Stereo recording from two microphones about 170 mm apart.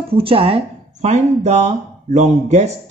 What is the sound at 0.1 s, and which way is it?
Speech, 30° right (ahead or behind).